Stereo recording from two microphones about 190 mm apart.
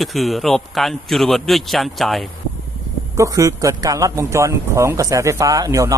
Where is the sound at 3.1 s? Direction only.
15° right (ahead or behind).